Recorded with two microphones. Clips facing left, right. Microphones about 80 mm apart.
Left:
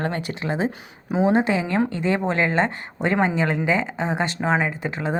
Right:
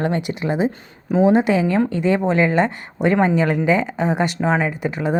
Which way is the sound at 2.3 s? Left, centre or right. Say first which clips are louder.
Right 4 dB; centre.